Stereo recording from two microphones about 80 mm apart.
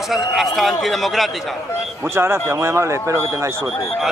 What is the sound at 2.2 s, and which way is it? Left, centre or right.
Speech, right.